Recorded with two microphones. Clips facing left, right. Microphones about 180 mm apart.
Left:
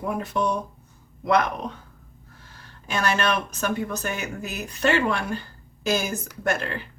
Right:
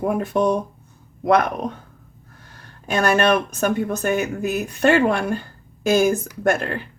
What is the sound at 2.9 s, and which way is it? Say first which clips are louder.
Speech: right 7 dB; 55° right (ahead or behind).